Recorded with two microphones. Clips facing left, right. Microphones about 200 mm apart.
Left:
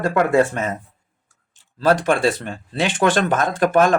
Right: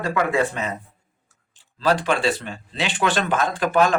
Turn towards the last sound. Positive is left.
turn(degrees=50)  # may be behind; listen again after turning